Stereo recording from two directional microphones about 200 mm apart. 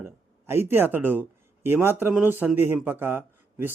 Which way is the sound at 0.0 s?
10° right (ahead or behind).